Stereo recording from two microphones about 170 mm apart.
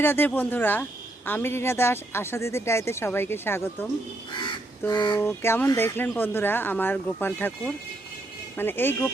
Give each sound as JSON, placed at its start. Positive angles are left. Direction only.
{"t": 0.0, "sound": "speech", "side_deg": 10}
{"t": 4.9, "sound": "speech", "side_deg": 25}
{"t": 5.1, "sound": "speech", "side_deg": 15}